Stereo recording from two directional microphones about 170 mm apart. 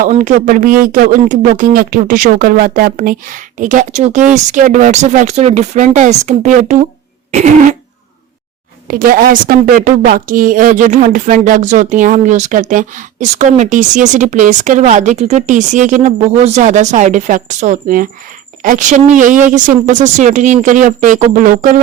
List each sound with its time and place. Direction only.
0.0 s a woman's voice: 50° right (ahead or behind)
8.9 s a woman's voice: 55° right (ahead or behind)